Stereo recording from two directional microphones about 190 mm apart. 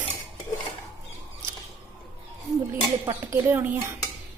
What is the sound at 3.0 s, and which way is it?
Speech, 15° right (ahead or behind).